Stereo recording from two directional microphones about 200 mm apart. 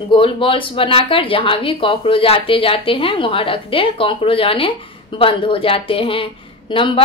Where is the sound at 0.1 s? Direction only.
25° left (ahead or behind).